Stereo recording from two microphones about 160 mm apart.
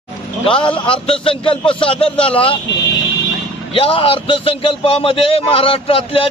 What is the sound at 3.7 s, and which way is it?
A man's voice, 35° left (ahead or behind).